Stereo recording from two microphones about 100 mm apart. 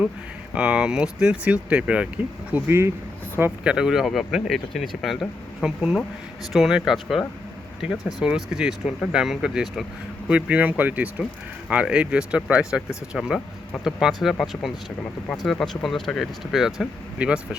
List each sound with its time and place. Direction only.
0.5 s speech: 10° right (ahead or behind)